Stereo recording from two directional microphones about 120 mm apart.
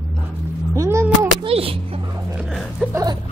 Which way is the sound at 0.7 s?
25° right (ahead or behind).